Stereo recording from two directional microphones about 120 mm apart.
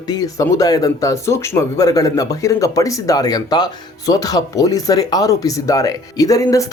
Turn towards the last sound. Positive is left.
turn(degrees=30)  # may be behind; listen again after turning